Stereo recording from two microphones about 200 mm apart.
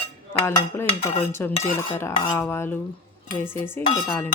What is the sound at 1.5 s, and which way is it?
Cutlery, 35° left (ahead or behind).